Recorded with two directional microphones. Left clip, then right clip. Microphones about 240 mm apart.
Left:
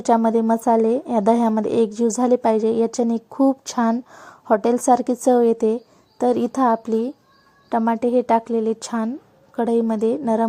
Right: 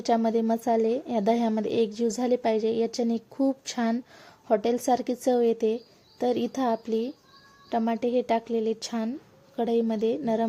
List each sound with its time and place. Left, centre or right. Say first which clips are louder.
0.0 s a woman's voice: left 7 dB; centre